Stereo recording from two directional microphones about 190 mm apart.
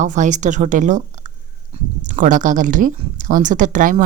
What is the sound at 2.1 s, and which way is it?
Speech, 45° right (ahead or behind).